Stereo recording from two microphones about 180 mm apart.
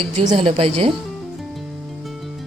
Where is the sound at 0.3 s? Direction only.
30° right (ahead or behind).